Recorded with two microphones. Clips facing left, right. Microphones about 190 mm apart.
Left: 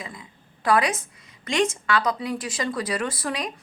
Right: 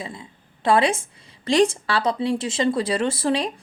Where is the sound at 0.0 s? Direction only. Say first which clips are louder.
Right 4 dB; 30° right (ahead or behind).